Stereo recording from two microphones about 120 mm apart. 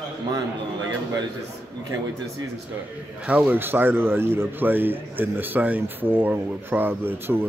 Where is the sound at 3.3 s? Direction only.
15° right (ahead or behind).